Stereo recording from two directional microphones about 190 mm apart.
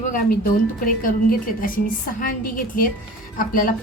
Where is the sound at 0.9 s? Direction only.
45° left (ahead or behind).